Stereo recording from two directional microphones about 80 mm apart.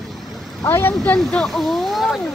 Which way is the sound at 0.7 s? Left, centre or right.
Left.